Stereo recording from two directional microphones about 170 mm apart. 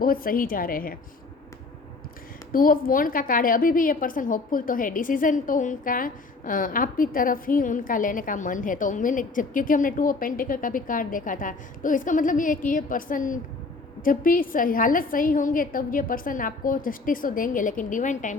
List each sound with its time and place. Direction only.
0.0 s a woman's voice: 55° left (ahead or behind)
2.5 s a woman's voice: 55° left (ahead or behind)